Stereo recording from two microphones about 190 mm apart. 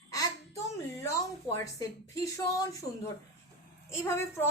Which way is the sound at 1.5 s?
15° left (ahead or behind).